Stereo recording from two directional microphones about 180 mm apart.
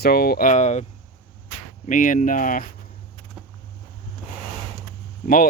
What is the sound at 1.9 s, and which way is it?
Speech, 45° left (ahead or behind).